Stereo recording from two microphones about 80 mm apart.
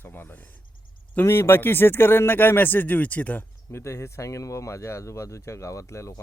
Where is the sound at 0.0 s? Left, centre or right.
Left.